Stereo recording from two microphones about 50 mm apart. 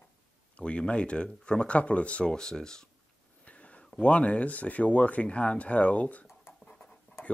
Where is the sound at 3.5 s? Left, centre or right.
Left.